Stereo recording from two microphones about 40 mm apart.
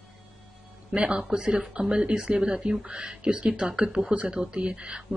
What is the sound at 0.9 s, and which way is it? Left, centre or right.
Speech, right.